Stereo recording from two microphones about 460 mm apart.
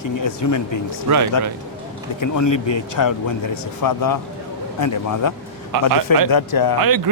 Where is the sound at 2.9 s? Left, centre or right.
Left.